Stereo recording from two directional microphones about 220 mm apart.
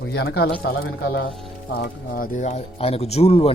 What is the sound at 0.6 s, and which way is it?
Speech, 60° left (ahead or behind).